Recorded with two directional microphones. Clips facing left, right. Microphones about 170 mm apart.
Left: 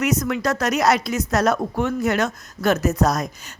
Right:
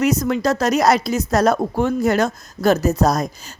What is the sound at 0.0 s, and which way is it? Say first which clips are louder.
A woman's voice: right 4 dB; 30° right (ahead or behind).